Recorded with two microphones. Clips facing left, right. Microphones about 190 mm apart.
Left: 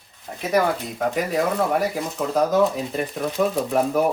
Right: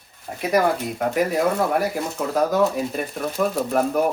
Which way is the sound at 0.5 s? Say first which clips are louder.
Right 1 dB; centre (ahead or behind).